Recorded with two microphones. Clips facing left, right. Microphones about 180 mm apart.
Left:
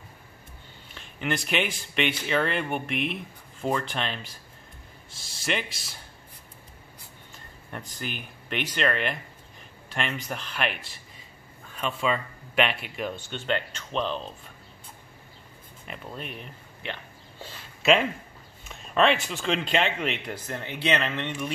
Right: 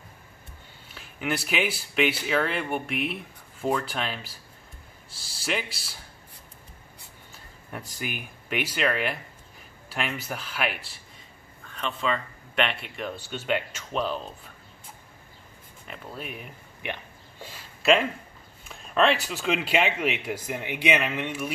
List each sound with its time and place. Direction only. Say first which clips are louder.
0.9 s speech: even; 5° right (ahead or behind)
5.4 s speech: even; centre (ahead or behind)
7.7 s speech: right 1 dB; 10° right (ahead or behind)
11.7 s speech: left 1 dB; 5° left (ahead or behind)
13.3 s speech: right 4 dB; 10° right (ahead or behind)
15.9 s speech: even; 5° right (ahead or behind)
18.7 s speech: even; centre (ahead or behind)